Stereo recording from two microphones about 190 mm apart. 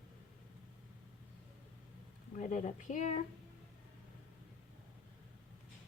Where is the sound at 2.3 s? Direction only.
40° left (ahead or behind).